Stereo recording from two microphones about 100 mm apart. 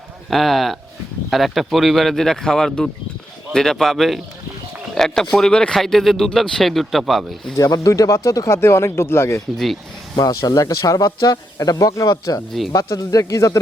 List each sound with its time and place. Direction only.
0.3 s speech: centre (ahead or behind)
7.5 s speech: 35° left (ahead or behind)
10.2 s speech: 40° left (ahead or behind)
12.5 s speech: centre (ahead or behind)
12.7 s speech: 35° left (ahead or behind)